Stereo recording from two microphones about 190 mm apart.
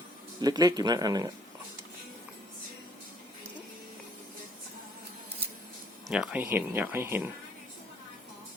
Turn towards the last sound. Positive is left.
turn(degrees=-10)  # may be behind; listen again after turning